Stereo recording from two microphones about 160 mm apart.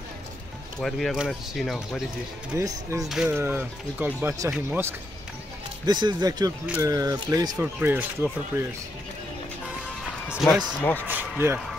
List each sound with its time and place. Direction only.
0.7 s speech: centre (ahead or behind)
2.5 s speech: 20° right (ahead or behind)
3.1 s speech: centre (ahead or behind)
5.9 s speech: 30° right (ahead or behind)
7.5 s speech: 10° right (ahead or behind)
10.2 s a sound: 5° right (ahead or behind)
10.8 s speech: 10° left (ahead or behind)
11.1 s speech: 10° right (ahead or behind)